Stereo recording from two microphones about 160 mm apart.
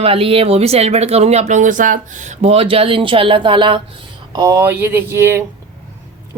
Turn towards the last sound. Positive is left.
turn(degrees=-15)  # may be behind; listen again after turning